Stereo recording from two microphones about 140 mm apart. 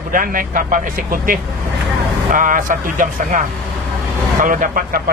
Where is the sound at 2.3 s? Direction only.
75° right (ahead or behind).